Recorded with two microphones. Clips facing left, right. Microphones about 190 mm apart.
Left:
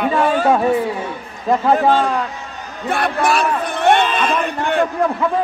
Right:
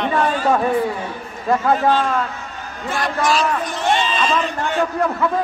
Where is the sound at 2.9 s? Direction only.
60° left (ahead or behind).